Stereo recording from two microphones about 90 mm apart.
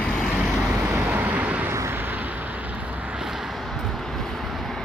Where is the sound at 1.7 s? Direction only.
30° right (ahead or behind).